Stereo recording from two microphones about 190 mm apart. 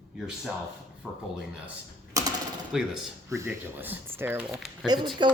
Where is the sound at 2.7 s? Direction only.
Centre (ahead or behind).